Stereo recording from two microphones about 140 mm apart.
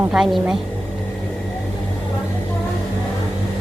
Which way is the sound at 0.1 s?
5° right (ahead or behind).